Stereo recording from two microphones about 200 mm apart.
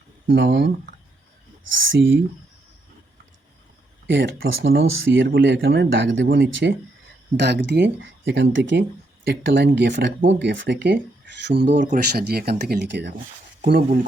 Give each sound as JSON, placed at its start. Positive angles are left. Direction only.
{"t": 0.3, "sound": "speech", "side_deg": -60}
{"t": 1.7, "sound": "speech", "side_deg": -70}
{"t": 4.0, "sound": "speech", "side_deg": -60}
{"t": 4.7, "sound": "speech", "side_deg": -60}
{"t": 11.7, "sound": "speech", "side_deg": -40}
{"t": 13.7, "sound": "speech", "side_deg": -45}